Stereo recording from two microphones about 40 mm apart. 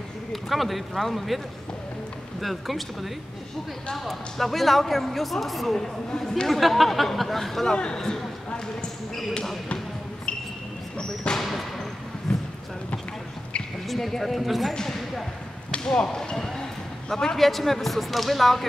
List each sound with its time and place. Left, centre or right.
0.3 s speech: centre
2.4 s speech: centre
7.6 s speech: left
11.3 s basketball bounce: centre
12.3 s basketball bounce: centre
13.8 s speech: centre
14.7 s speech: centre
16.3 s speech: centre
17.4 s speech: centre